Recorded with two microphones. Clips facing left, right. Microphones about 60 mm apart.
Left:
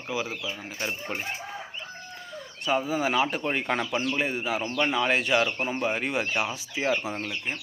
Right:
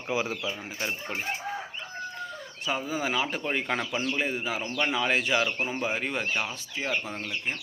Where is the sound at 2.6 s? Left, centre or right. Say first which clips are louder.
Left 4 dB; centre.